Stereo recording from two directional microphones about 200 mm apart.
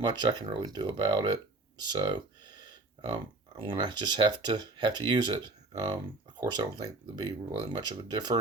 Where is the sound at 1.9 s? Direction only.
20° right (ahead or behind).